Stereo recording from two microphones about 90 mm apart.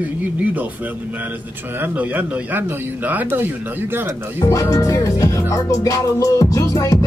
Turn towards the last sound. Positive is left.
turn(degrees=35)  # may be behind; listen again after turning